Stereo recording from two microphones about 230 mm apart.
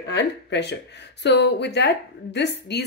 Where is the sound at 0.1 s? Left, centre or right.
Left.